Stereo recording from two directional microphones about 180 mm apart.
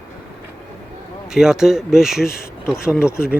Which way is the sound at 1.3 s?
5° right (ahead or behind).